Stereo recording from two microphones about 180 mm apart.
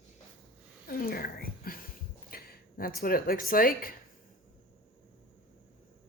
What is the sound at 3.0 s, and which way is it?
Speech, 55° left (ahead or behind).